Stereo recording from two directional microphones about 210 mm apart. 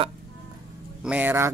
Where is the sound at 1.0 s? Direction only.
10° right (ahead or behind).